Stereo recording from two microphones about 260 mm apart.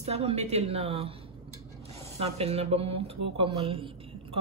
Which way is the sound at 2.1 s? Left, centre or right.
Right.